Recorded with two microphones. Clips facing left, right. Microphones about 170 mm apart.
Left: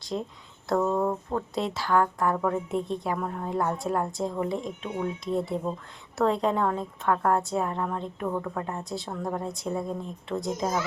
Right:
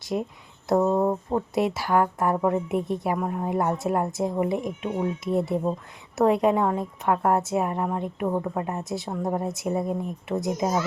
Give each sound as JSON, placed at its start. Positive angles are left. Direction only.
{"t": 0.1, "sound": "a woman's voice", "side_deg": -15}